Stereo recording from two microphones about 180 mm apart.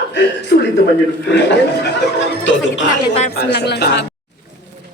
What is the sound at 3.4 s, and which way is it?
Speech, 65° left (ahead or behind).